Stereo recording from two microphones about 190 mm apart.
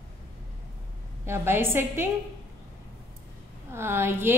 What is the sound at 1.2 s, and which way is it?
Speech, 10° right (ahead or behind).